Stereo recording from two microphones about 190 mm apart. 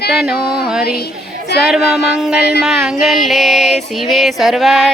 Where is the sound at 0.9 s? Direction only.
55° left (ahead or behind).